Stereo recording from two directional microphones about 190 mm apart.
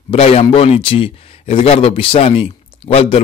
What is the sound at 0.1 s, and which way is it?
Speech, 30° left (ahead or behind).